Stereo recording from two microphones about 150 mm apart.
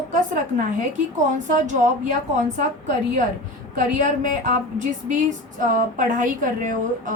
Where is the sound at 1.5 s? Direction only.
55° right (ahead or behind).